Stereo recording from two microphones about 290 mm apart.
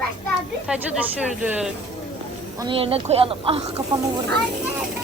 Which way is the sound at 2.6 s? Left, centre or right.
Centre.